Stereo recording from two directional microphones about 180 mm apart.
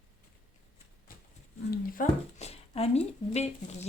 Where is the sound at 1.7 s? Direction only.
45° left (ahead or behind).